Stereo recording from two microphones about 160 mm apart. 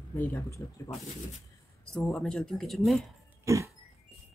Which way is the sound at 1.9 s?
5° left (ahead or behind).